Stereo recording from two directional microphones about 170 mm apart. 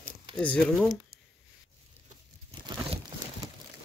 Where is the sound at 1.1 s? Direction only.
65° right (ahead or behind).